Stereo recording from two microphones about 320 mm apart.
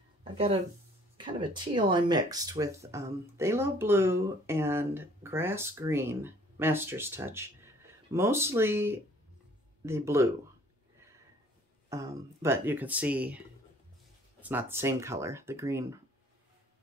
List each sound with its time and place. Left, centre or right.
0.2 s speech: centre
11.9 s speech: centre
14.4 s speech: centre